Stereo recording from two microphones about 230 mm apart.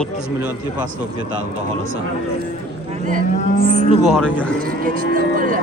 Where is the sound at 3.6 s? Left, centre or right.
Left.